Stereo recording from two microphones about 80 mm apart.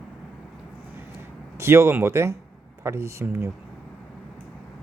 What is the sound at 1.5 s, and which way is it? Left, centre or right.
Speech, right.